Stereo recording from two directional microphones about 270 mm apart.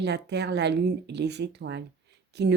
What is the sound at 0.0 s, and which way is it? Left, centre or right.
Speech, right.